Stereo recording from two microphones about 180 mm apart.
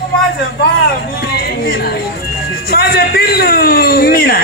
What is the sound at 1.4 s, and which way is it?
Speech, 60° left (ahead or behind).